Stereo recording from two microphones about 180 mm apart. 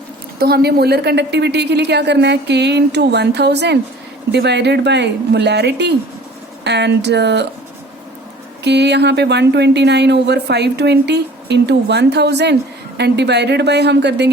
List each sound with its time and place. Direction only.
0.3 s speech: 60° right (ahead or behind)
8.6 s speech: 70° right (ahead or behind)